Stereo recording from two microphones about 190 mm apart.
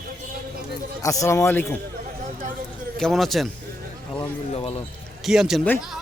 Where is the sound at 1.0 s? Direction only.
15° left (ahead or behind).